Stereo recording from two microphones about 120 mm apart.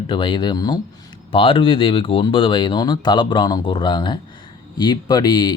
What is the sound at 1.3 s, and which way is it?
Speech, 50° left (ahead or behind).